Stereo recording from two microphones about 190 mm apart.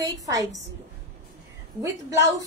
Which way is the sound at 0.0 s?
20° right (ahead or behind).